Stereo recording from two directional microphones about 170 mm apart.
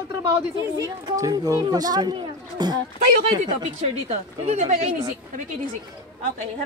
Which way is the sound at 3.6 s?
40° right (ahead or behind).